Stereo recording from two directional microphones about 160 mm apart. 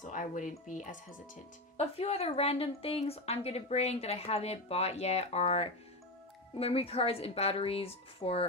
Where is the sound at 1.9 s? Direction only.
40° left (ahead or behind).